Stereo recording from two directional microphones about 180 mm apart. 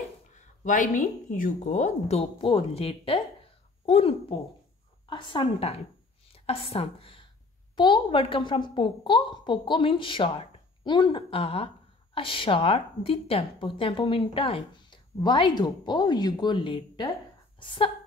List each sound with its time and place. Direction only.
0.7 s a woman's voice: 45° left (ahead or behind); by 17.9 s 30° left (ahead or behind)